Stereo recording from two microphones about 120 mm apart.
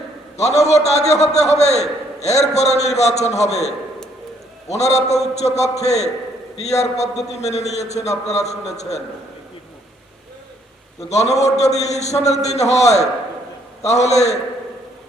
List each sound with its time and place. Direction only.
0.3 s a man's voice: 65° left (ahead or behind)
4.7 s a man's voice: 65° left (ahead or behind)
11.1 s a man's voice: 65° left (ahead or behind)